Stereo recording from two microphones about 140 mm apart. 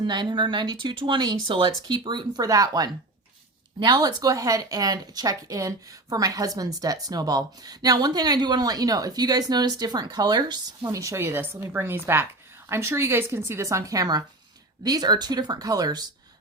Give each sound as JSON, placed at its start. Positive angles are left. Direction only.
{"t": 0.0, "sound": "speech", "side_deg": -30}